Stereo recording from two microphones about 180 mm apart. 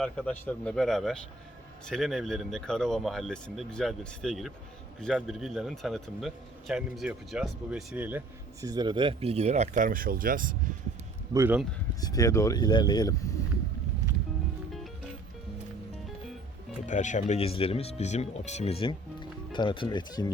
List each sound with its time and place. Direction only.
0.0 s speech: 5° left (ahead or behind); by 8.2 s 10° right (ahead or behind)
8.6 s speech: 20° right (ahead or behind); by 10.7 s 50° right (ahead or behind)
11.3 s speech: 10° right (ahead or behind)
11.9 s speech: 20° left (ahead or behind)
16.8 s speech: 45° left (ahead or behind); by 20.2 s 25° left (ahead or behind)